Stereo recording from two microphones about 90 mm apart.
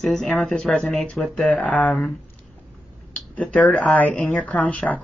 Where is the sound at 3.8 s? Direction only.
15° left (ahead or behind).